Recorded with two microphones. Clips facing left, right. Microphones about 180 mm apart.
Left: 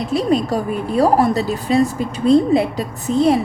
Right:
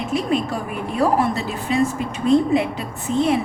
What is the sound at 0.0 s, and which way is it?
A woman's voice, 35° left (ahead or behind).